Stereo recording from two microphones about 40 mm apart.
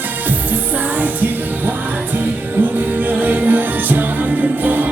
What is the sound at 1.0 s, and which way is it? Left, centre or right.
Music, right.